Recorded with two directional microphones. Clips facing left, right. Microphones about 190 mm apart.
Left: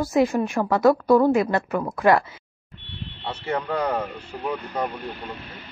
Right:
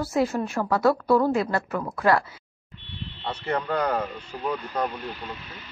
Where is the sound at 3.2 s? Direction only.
5° left (ahead or behind).